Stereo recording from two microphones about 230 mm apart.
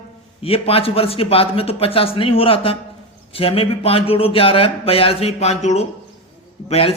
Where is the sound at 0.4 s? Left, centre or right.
Left.